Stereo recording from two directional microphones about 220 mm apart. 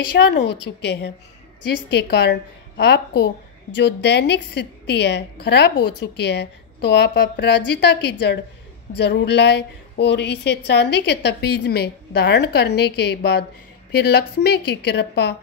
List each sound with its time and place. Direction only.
0.2 s a woman's voice: 50° left (ahead or behind)